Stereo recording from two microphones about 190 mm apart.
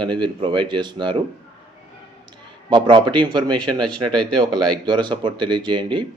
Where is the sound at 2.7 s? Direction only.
25° right (ahead or behind).